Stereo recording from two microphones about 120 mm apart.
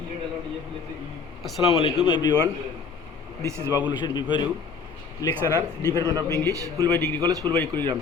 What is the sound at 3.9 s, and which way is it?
Speech, 40° left (ahead or behind).